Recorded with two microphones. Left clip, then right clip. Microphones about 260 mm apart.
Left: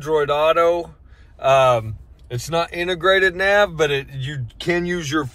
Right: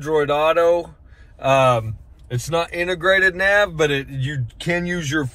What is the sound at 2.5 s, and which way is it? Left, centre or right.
A man's voice, left.